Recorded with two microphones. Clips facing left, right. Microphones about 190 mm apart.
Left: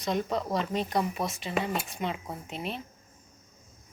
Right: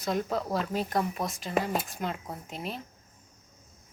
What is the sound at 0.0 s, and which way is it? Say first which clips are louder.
Speech: even; centre (ahead or behind).